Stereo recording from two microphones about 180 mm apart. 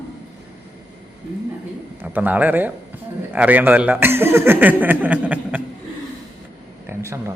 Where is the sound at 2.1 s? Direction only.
10° right (ahead or behind).